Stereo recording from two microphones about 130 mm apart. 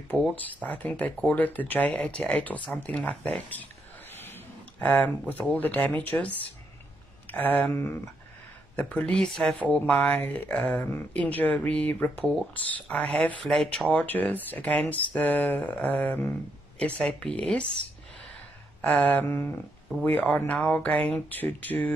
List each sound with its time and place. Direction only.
0.1 s speech: 10° left (ahead or behind)
4.1 s a sound: 15° left (ahead or behind)
5.5 s speech: 10° left (ahead or behind)
18.8 s speech: 10° left (ahead or behind)